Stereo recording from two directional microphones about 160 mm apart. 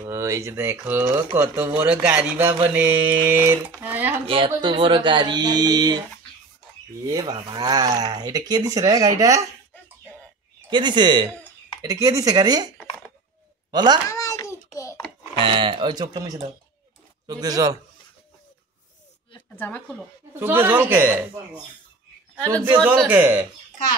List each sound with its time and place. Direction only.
0.0 s speech: 20° right (ahead or behind)
4.3 s speech: 30° right (ahead or behind)
7.1 s speech: 25° right (ahead or behind)
10.7 s speech: 30° right (ahead or behind)
14.0 s a sound: 20° left (ahead or behind)
15.3 s speech: 35° right (ahead or behind)
19.5 s speech: 10° left (ahead or behind)
20.3 s speech: 15° right (ahead or behind)